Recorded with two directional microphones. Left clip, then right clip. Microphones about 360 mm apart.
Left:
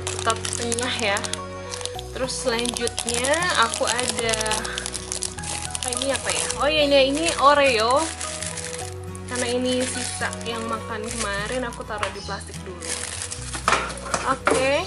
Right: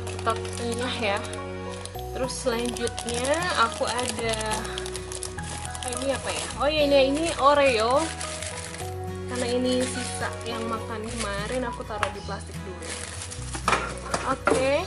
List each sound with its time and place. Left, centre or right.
0.2 s speech: centre
6.1 s speech: centre
9.3 s speech: centre
13.7 s chopping: centre